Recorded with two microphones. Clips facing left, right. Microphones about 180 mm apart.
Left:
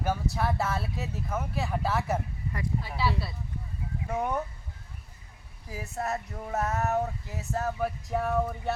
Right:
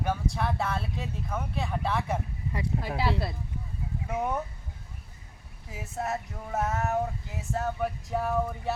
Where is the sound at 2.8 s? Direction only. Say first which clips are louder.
Right 1 dB; 50° right (ahead or behind).